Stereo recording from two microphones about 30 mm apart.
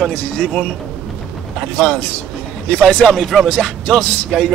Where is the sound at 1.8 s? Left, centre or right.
Left.